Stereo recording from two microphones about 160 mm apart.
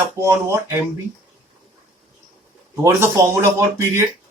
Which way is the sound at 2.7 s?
15° right (ahead or behind).